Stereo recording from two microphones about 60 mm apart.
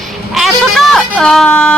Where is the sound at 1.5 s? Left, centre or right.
Centre.